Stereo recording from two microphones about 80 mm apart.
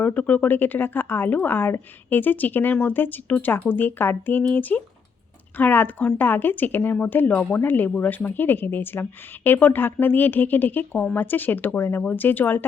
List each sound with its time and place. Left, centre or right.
0.0 s speech: centre